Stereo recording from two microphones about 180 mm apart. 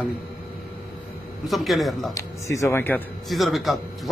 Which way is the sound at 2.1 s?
15° left (ahead or behind).